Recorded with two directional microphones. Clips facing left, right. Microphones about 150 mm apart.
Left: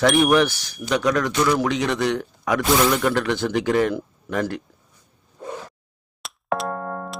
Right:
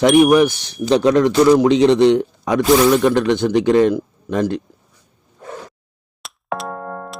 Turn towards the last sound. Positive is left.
turn(degrees=0)  # may be behind; listen again after turning